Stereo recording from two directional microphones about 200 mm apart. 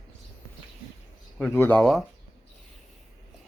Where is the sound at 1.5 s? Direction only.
10° left (ahead or behind).